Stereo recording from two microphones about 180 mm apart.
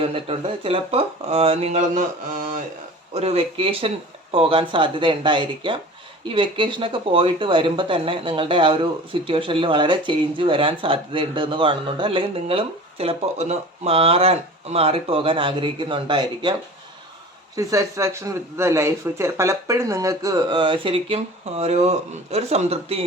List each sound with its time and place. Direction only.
0.0 s speech: 30° right (ahead or behind)
3.2 s speech: 35° right (ahead or behind)
17.6 s speech: 15° right (ahead or behind); by 23.0 s 35° right (ahead or behind)